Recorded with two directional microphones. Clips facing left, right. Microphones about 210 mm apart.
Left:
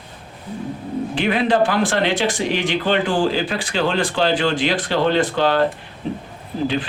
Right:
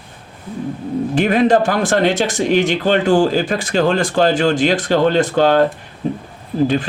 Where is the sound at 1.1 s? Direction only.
45° right (ahead or behind).